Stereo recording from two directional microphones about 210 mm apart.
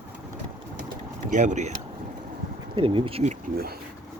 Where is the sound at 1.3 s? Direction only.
35° right (ahead or behind).